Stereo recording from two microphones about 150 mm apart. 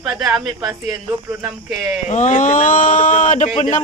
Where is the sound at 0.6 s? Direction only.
20° right (ahead or behind).